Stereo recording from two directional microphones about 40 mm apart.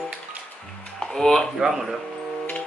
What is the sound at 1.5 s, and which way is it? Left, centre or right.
Speech, centre.